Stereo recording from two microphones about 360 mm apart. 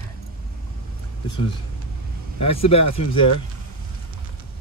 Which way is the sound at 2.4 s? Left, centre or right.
Centre.